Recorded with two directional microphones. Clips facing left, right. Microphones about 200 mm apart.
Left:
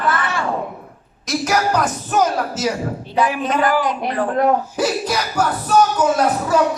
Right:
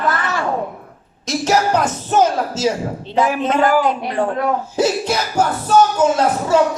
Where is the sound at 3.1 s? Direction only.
45° right (ahead or behind).